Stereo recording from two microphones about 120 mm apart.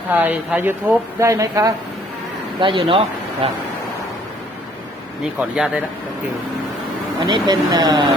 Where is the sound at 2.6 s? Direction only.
45° right (ahead or behind).